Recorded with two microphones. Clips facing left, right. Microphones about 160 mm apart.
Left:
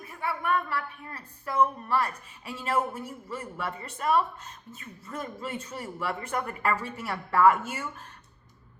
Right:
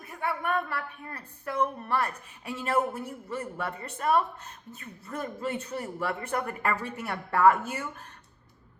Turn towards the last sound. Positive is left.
turn(degrees=-40)  # may be behind; listen again after turning